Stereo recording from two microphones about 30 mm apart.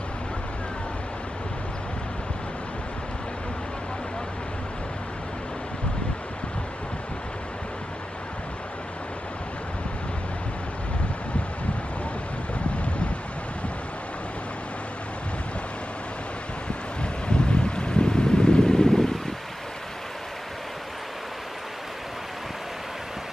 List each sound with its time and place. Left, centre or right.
17.0 s wind: left; by 19.1 s centre